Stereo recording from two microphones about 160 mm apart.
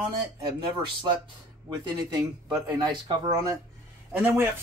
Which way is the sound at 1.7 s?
25° right (ahead or behind).